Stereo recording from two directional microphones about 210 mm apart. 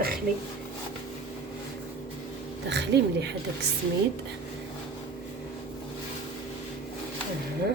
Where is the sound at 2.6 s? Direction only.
55° right (ahead or behind).